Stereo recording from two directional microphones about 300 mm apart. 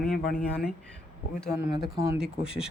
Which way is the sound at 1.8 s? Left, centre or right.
Centre.